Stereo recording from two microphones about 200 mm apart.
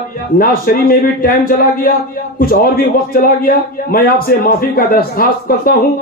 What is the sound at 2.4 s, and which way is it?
A man's voice, 50° left (ahead or behind).